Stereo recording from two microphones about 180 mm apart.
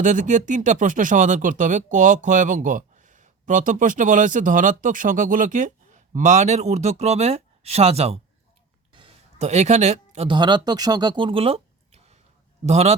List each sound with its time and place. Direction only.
0.0 s speech: 40° right (ahead or behind)